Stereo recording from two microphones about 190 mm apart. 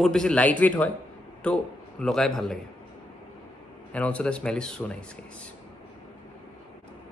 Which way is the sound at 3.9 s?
5° left (ahead or behind).